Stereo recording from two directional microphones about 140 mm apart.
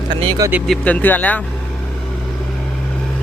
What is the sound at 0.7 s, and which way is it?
Speech, 10° left (ahead or behind).